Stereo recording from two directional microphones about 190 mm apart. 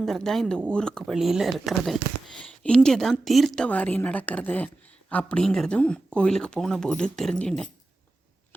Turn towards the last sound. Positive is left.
turn(degrees=5)  # may be behind; listen again after turning